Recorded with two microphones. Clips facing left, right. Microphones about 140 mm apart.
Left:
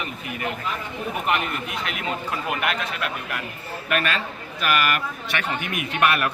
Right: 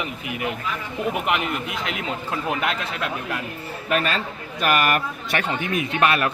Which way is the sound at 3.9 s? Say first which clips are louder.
Right 2 dB; 35° right (ahead or behind).